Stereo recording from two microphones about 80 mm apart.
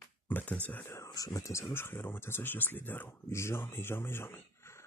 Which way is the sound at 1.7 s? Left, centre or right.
Left.